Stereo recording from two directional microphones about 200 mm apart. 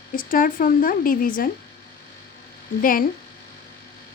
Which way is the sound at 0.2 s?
45° left (ahead or behind).